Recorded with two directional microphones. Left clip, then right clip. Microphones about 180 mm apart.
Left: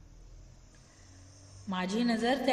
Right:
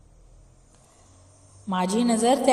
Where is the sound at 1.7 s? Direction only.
35° right (ahead or behind).